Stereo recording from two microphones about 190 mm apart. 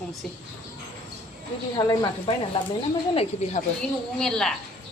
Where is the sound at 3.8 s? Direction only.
5° left (ahead or behind).